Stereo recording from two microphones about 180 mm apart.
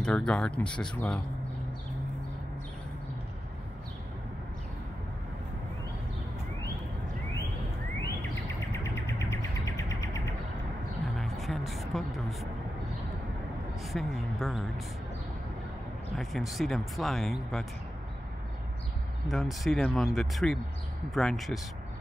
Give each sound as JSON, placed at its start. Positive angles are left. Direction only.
{"t": 0.0, "sound": "speech", "side_deg": 5}
{"t": 8.7, "sound": "music", "side_deg": 15}
{"t": 11.1, "sound": "music", "side_deg": 0}
{"t": 13.9, "sound": "speech", "side_deg": 0}
{"t": 16.2, "sound": "speech", "side_deg": 0}
{"t": 19.2, "sound": "speech", "side_deg": 0}